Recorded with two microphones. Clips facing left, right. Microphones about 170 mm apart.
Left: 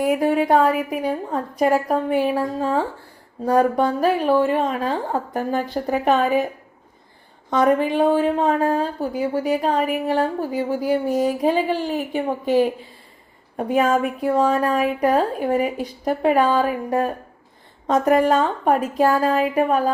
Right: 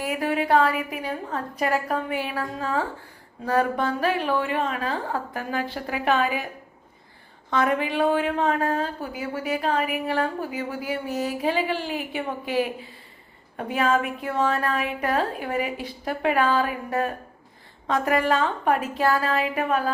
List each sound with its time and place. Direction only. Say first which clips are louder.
0.2 s a woman's voice: left 4 dB; 40° left (ahead or behind)
7.5 s a woman's voice: left 6 dB; 40° left (ahead or behind)